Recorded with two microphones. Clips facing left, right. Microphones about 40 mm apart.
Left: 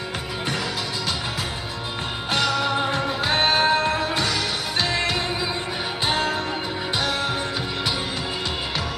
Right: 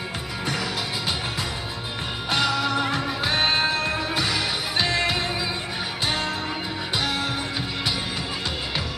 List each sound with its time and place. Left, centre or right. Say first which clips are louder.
2.3 s music: left 1 dB; centre
2.6 s music: left 1 dB; left
3.9 s music: left 2 dB; centre
6.0 s music: left 4 dB; left